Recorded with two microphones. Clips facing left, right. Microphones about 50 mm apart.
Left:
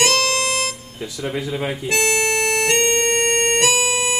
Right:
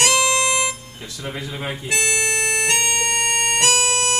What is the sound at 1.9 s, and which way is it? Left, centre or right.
Harmonica, left.